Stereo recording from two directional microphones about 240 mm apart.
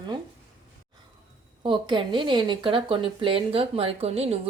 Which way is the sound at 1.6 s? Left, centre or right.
Centre.